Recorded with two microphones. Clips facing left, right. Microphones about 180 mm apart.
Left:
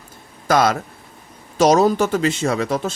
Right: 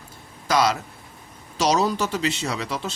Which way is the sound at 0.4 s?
50° left (ahead or behind).